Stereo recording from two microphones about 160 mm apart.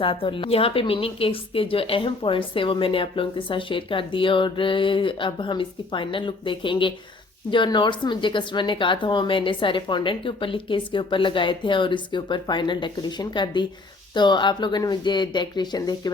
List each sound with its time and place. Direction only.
0.0 s a woman's voice: 30° left (ahead or behind)